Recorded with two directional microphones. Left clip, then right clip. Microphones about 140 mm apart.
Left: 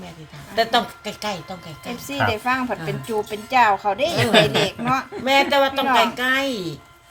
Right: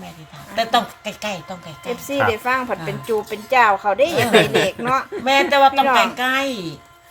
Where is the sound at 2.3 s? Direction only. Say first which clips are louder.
Right 2 dB; 65° right (ahead or behind).